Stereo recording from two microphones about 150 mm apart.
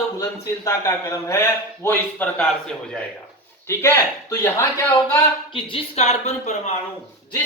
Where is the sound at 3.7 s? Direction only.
15° left (ahead or behind).